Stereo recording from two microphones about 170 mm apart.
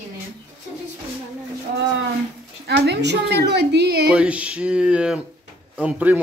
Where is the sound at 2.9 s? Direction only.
85° right.